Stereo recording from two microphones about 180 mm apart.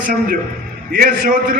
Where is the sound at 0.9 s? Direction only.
55° right (ahead or behind).